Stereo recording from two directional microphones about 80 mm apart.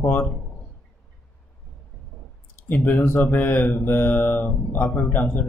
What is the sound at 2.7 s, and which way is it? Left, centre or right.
Speech, left.